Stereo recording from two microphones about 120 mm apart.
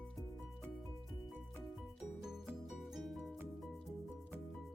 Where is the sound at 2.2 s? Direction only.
5° right (ahead or behind).